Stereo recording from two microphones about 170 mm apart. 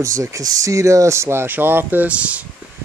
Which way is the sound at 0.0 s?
20° right (ahead or behind).